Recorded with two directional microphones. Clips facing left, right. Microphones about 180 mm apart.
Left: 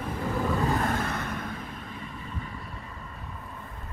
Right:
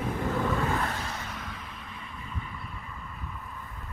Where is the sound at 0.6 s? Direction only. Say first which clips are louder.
Left 3 dB; 50° left (ahead or behind).